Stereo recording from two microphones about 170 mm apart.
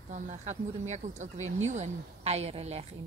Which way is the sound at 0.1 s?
45° right (ahead or behind).